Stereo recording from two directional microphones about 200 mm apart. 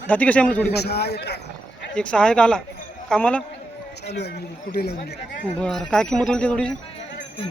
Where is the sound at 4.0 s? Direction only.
55° left (ahead or behind).